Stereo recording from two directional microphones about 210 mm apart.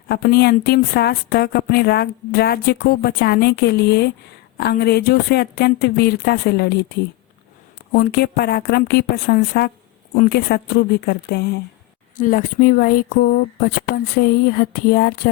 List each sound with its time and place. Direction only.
0.1 s a woman's voice: 50° left (ahead or behind)
12.1 s a woman's voice: 40° left (ahead or behind)